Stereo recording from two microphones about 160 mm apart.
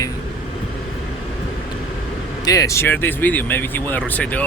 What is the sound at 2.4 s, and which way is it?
Speech, 20° left (ahead or behind).